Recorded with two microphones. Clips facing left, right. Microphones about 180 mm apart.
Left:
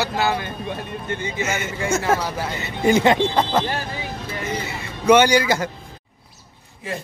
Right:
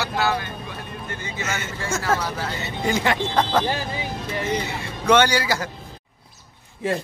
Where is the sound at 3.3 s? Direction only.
10° left (ahead or behind).